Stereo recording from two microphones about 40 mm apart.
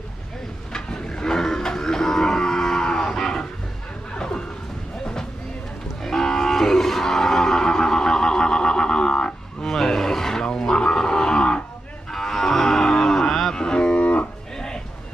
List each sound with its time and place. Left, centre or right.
0.7 s livestock: centre
4.2 s a sound: left
6.0 s cattle: centre
9.6 s wild animals: centre
12.1 s cattle: centre
13.6 s livestock: left
14.0 s music: left
14.5 s a sound: centre